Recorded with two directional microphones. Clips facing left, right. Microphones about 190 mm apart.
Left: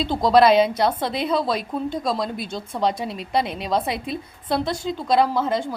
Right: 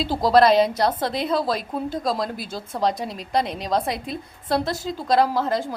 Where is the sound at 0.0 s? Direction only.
Centre (ahead or behind).